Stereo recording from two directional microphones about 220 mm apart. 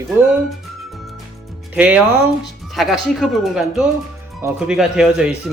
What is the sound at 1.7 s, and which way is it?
Speech, 5° right (ahead or behind).